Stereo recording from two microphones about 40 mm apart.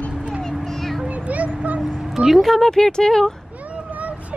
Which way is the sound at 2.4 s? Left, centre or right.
Centre.